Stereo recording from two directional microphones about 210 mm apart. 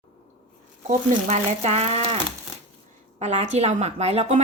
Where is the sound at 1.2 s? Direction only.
30° right (ahead or behind).